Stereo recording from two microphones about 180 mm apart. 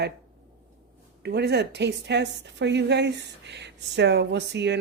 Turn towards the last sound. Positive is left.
turn(degrees=-70)  # may be behind; listen again after turning